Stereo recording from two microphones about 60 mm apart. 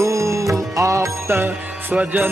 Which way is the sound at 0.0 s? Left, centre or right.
Right.